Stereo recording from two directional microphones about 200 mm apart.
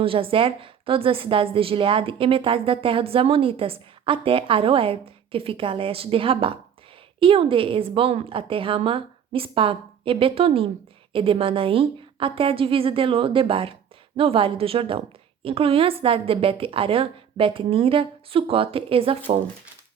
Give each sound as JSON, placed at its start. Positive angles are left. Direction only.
{"t": 0.0, "sound": "a woman's voice", "side_deg": -25}